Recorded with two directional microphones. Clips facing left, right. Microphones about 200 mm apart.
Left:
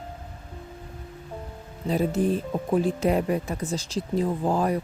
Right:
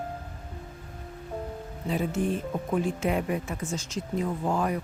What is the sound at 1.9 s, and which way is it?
Speech, 35° left (ahead or behind).